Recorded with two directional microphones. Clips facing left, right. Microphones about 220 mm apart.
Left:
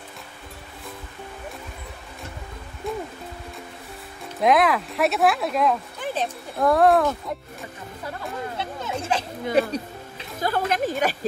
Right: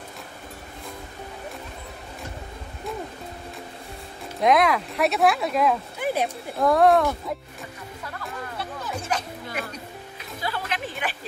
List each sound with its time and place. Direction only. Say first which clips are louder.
4.4 s speech: left 1 dB; centre (ahead or behind)
6.5 s speech: even; centre (ahead or behind)
8.5 s a sound: left 3 dB; 25° left (ahead or behind)
10.4 s speech: left 7 dB; 45° left (ahead or behind)